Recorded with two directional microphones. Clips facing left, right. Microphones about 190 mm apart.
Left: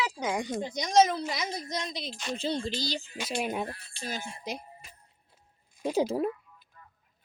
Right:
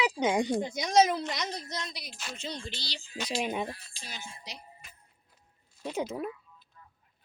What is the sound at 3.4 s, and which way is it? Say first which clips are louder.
Speech: even; centre (ahead or behind).